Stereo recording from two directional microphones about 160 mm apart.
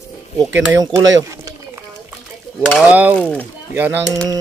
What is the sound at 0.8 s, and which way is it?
Pigeon, 20° right (ahead or behind).